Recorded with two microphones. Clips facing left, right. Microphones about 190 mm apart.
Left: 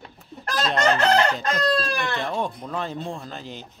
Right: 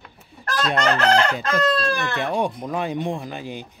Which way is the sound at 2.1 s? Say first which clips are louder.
Right 4 dB; 10° right (ahead or behind).